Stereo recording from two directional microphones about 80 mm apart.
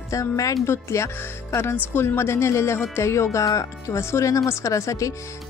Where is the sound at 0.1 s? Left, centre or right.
Left.